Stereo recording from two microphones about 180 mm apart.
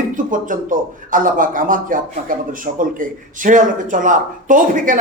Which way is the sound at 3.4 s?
45° right (ahead or behind).